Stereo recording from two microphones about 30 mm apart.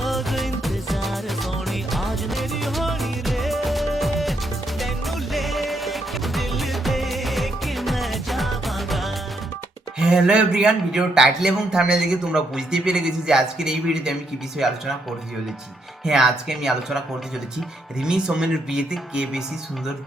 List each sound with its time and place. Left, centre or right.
0.0 s music: centre
10.0 s speech: right; by 14.8 s centre
16.0 s speech: centre
18.0 s speech: right